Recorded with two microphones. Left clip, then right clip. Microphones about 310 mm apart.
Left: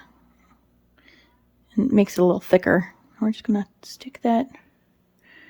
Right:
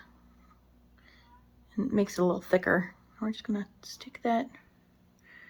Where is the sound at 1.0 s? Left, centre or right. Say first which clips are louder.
Left 7 dB; left.